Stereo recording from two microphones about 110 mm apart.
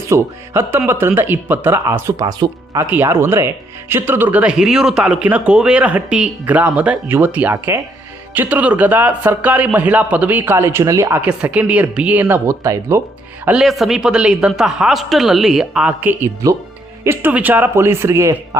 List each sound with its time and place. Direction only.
0.1 s speech: 25° right (ahead or behind)
1.9 s speech: 30° right (ahead or behind)
2.7 s speech: 20° right (ahead or behind)
11.2 s speech: 10° right (ahead or behind)
13.6 s speech: centre (ahead or behind); by 18.3 s 25° right (ahead or behind)